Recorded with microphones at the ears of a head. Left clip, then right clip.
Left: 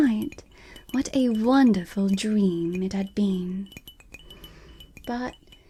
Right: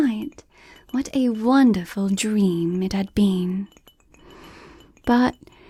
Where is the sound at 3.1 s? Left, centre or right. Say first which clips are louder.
Right 5 dB; right.